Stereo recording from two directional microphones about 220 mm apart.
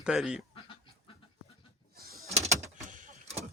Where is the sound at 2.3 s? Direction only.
30° right (ahead or behind).